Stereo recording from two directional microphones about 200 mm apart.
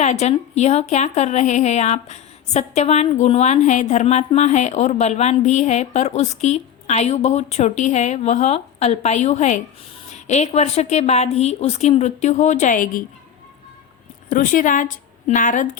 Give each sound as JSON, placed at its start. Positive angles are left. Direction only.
{"t": 0.0, "sound": "a woman's voice", "side_deg": 35}
{"t": 14.3, "sound": "a woman's voice", "side_deg": 40}